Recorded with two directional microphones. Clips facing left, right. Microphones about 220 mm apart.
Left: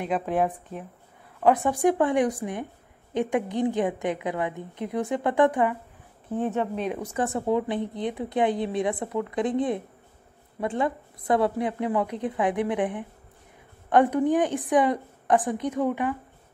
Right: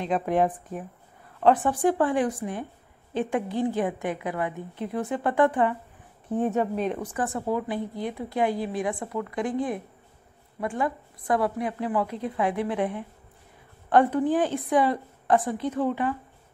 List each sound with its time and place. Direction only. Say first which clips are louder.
1.4 s a woman's voice: even; 10° left (ahead or behind)
6.4 s speech: right 2 dB; 10° right (ahead or behind)
7.1 s a woman's voice: left 3 dB; 25° left (ahead or behind)